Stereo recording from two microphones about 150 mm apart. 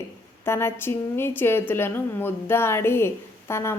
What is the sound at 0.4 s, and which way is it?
A woman's voice, 15° left (ahead or behind).